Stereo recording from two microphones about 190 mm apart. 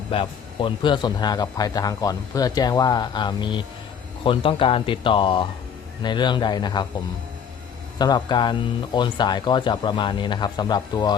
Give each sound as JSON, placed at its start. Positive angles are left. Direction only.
{"t": 0.1, "sound": "a man's voice", "side_deg": 30}
{"t": 7.9, "sound": "a man's voice", "side_deg": 20}